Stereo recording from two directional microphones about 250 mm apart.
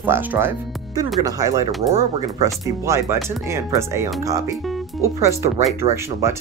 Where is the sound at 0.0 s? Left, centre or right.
Centre.